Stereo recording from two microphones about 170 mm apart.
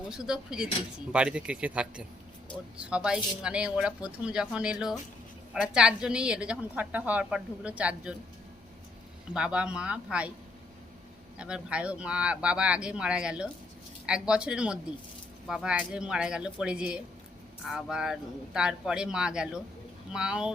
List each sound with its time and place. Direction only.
0.1 s a woman's voice: 5° right (ahead or behind)
9.3 s a woman's voice: 5° right (ahead or behind)
11.3 s a woman's voice: 5° right (ahead or behind)